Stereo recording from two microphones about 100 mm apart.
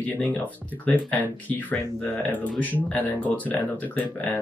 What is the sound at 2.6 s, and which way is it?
Speech, 15° left (ahead or behind).